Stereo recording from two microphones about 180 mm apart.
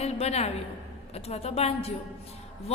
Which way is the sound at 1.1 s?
35° left (ahead or behind).